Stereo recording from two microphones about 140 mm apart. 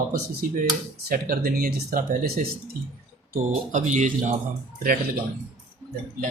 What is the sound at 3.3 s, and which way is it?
Speech, 60° right (ahead or behind).